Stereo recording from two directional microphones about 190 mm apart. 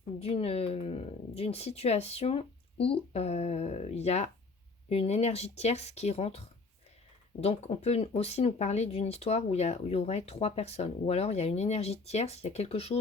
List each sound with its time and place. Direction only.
0.2 s speech: 30° left (ahead or behind)
7.4 s speech: 35° left (ahead or behind)